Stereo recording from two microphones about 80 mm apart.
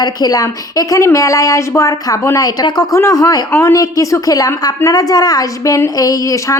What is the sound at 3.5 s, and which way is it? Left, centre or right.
A woman's voice, left.